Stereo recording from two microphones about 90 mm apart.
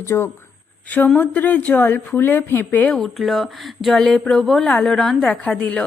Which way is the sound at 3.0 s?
Centre (ahead or behind).